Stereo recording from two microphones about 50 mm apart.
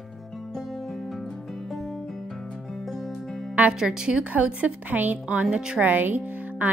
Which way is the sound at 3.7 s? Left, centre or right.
Centre.